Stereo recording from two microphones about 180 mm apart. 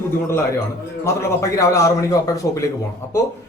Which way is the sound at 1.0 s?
15° left (ahead or behind).